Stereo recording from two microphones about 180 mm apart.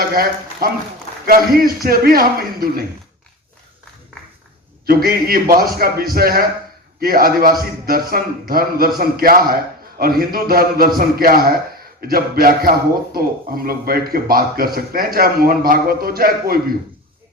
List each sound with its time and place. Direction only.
0.1 s a man's voice: 55° right (ahead or behind)
4.9 s a man's voice: 55° right (ahead or behind)